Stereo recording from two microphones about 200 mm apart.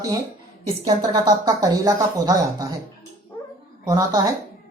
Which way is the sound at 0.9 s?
20° right (ahead or behind).